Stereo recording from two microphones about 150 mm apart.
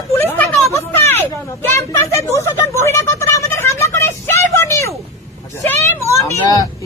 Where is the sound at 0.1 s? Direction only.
15° left (ahead or behind).